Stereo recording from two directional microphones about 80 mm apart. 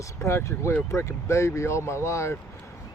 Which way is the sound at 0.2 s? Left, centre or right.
Left.